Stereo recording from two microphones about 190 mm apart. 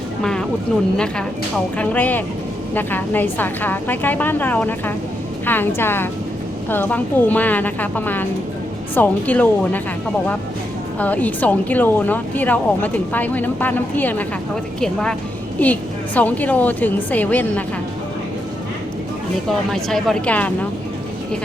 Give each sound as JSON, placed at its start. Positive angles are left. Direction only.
{"t": 0.2, "sound": "a sound", "side_deg": 5}
{"t": 0.9, "sound": "speech", "side_deg": 5}
{"t": 11.0, "sound": "speech", "side_deg": 10}
{"t": 19.5, "sound": "speech", "side_deg": 0}